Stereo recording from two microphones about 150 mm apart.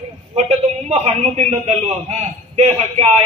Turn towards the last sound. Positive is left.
turn(degrees=-40)  # may be behind; listen again after turning